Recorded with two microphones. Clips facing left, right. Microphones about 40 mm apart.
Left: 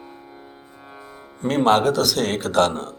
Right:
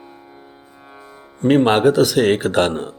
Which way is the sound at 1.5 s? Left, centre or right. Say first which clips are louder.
Right 4 dB; right.